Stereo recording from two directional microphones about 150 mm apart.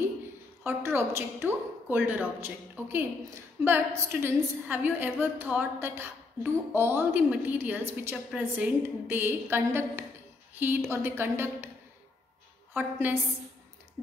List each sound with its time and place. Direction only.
0.7 s a woman's voice: 15° right (ahead or behind)
12.7 s a woman's voice: 15° right (ahead or behind)